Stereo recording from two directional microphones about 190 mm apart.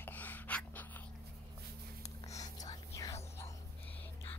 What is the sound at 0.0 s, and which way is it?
Gasp, 10° left (ahead or behind).